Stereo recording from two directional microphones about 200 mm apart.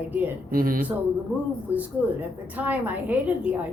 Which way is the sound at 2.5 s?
10° right (ahead or behind).